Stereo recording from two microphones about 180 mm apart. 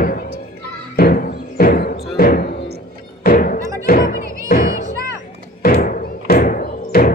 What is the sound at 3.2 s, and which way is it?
Thunk, 50° left (ahead or behind).